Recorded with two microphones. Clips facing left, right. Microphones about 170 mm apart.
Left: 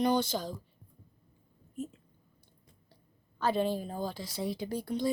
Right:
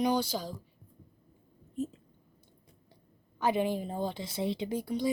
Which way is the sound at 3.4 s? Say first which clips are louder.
Right 1 dB; 15° right (ahead or behind).